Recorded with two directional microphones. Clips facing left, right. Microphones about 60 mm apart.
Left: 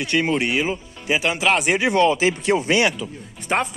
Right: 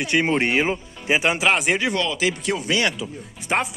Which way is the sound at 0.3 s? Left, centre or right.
Right.